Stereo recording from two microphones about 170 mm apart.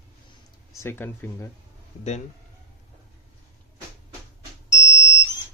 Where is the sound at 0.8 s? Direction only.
15° left (ahead or behind).